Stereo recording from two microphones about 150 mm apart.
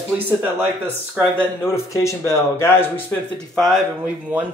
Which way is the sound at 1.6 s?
15° left (ahead or behind).